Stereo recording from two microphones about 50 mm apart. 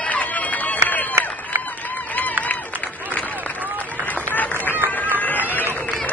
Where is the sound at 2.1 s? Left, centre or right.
Left.